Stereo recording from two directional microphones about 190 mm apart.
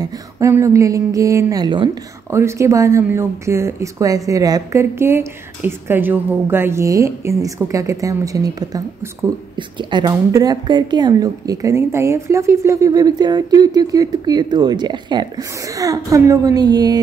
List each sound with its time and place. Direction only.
0.4 s a woman's voice: 15° right (ahead or behind)